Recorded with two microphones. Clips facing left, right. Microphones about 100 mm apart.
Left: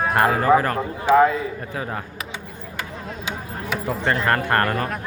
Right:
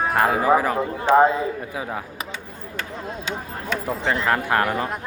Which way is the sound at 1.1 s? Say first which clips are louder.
Even; 25° right (ahead or behind).